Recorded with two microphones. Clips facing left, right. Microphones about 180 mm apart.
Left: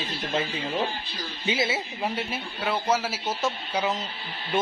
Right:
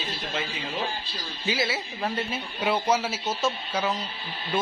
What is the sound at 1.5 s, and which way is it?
Speech, 20° left (ahead or behind).